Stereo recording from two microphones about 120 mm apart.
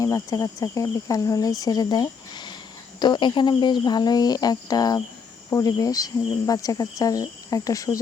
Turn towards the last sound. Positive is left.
turn(degrees=30)  # may be behind; listen again after turning